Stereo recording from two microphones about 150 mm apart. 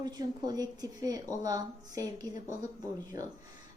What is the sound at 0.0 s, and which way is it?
Speech, 25° right (ahead or behind).